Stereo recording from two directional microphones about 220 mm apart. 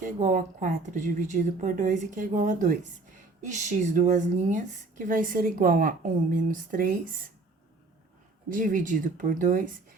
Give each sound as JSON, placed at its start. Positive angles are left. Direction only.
{"t": 0.0, "sound": "speech", "side_deg": -35}
{"t": 8.4, "sound": "speech", "side_deg": -35}